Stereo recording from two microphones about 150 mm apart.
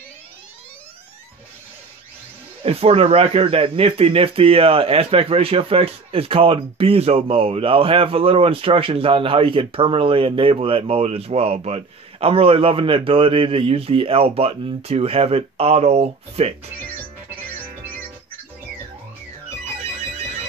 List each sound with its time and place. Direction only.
2.6 s speech: 40° right (ahead or behind)